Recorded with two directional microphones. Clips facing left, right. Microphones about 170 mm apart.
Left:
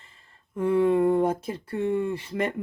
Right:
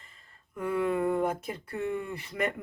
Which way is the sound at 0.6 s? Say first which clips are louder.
Left 7 dB; 30° left (ahead or behind).